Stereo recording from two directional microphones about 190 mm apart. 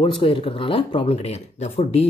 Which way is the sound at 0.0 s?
25° left (ahead or behind).